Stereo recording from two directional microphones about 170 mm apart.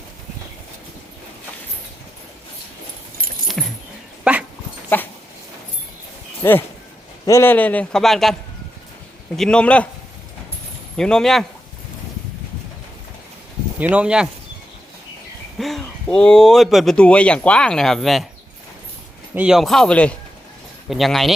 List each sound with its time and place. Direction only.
3.4 s keys jangling: centre (ahead or behind)
4.2 s dog: 10° right (ahead or behind)
4.9 s a man's voice: 10° left (ahead or behind)
6.4 s a man's voice: 15° left (ahead or behind)
10.9 s speech: 5° left (ahead or behind)
13.9 s speech: 5° right (ahead or behind)
15.5 s speech: centre (ahead or behind)
19.3 s speech: 5° right (ahead or behind)